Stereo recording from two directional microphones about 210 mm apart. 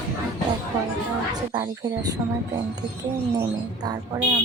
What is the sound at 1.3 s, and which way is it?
Speech, 15° right (ahead or behind).